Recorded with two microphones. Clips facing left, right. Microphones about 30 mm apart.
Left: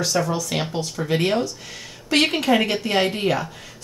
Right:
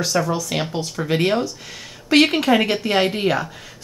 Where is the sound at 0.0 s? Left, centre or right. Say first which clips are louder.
Right 1 dB; centre.